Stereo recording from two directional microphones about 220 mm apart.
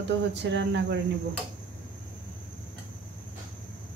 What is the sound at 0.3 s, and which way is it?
Speech, 55° right (ahead or behind).